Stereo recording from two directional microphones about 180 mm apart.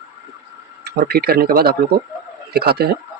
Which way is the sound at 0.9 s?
60° right (ahead or behind).